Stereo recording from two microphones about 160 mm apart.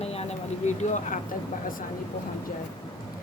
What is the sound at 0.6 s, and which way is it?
Speech, 50° left (ahead or behind).